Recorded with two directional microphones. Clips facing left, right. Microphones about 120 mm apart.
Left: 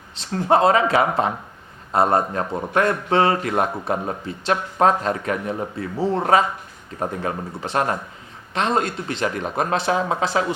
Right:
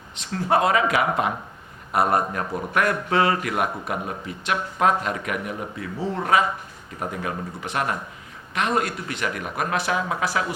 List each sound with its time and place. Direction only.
0.2 s speech: 30° left (ahead or behind)